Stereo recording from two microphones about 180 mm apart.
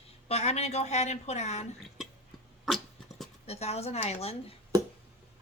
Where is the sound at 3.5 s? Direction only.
35° left (ahead or behind).